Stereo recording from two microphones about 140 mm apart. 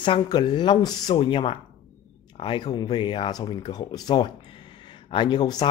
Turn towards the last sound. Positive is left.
turn(degrees=30)  # may be behind; listen again after turning